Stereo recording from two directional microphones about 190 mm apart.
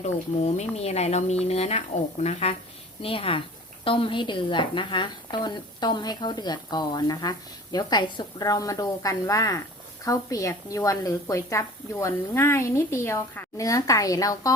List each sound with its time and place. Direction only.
0.0 s a woman's voice: 35° left (ahead or behind); by 14.5 s 20° left (ahead or behind)